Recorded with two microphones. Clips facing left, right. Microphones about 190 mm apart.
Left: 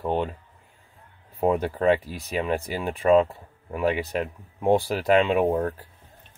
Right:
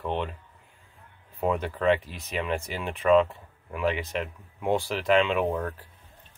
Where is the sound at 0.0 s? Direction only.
40° left (ahead or behind).